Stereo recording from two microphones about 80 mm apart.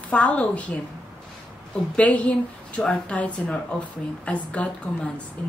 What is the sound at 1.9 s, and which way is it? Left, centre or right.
Speech, centre.